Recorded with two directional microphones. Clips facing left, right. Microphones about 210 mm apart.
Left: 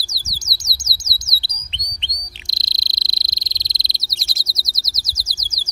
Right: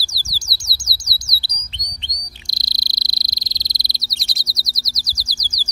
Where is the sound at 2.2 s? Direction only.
20° left (ahead or behind).